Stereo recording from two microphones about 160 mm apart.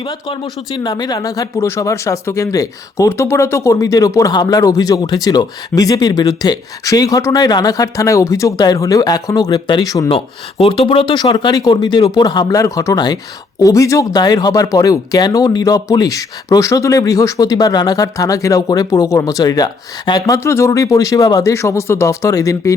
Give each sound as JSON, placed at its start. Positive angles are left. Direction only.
{"t": 0.0, "sound": "speech", "side_deg": 30}
{"t": 10.1, "sound": "speech", "side_deg": 35}